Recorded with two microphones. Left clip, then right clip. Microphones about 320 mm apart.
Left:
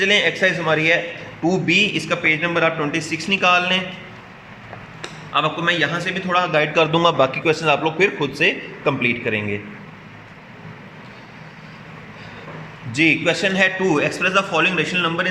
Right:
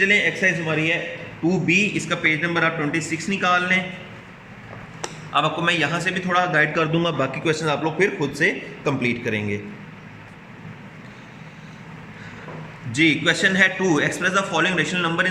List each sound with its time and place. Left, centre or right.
0.4 s a man's voice: centre
5.3 s a man's voice: centre
12.9 s a man's voice: centre